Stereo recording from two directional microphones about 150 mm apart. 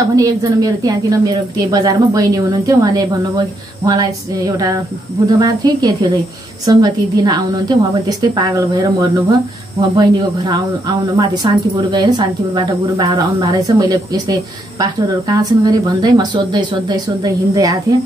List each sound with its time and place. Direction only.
0.1 s a woman's voice: 20° right (ahead or behind)